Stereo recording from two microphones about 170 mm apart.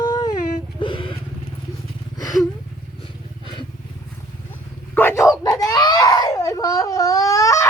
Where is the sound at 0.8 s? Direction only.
30° left (ahead or behind).